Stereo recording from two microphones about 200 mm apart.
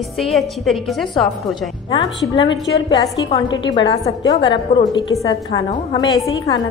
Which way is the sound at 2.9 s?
25° left (ahead or behind).